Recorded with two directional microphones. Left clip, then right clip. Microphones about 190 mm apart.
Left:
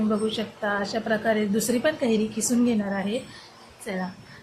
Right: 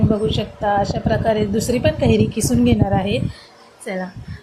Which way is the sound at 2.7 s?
20° right (ahead or behind).